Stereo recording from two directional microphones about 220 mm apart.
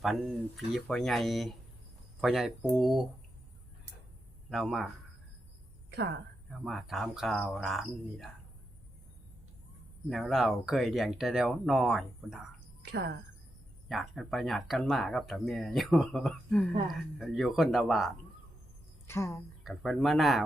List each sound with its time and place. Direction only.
0.0 s speech: centre (ahead or behind)
4.4 s speech: centre (ahead or behind)
6.7 s speech: centre (ahead or behind)
10.1 s speech: centre (ahead or behind)
12.8 s speech: 50° right (ahead or behind)
13.8 s speech: centre (ahead or behind)
19.0 s a woman's voice: 10° left (ahead or behind)
19.6 s speech: centre (ahead or behind)